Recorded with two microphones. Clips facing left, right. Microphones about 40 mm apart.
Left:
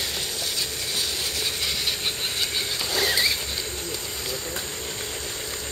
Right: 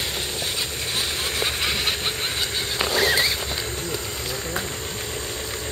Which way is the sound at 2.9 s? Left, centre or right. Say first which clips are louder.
Right 3 dB; centre.